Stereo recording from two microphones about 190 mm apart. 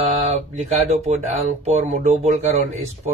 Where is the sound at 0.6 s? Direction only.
35° right (ahead or behind).